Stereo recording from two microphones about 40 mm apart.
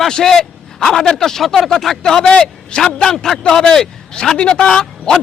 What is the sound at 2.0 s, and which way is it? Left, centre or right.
A man's voice, centre.